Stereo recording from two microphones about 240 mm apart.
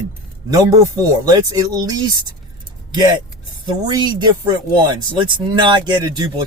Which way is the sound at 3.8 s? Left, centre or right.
Centre.